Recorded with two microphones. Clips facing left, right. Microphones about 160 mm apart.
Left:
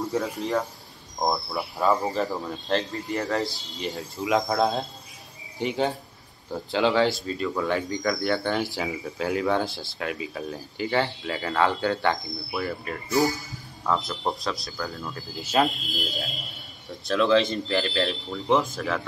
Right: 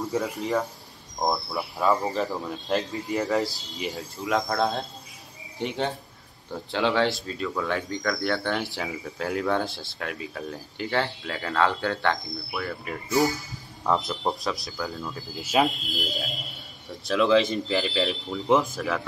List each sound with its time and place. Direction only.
0.0 s speech: centre (ahead or behind)
13.8 s a man's voice: 20° right (ahead or behind)
14.2 s speech: centre (ahead or behind)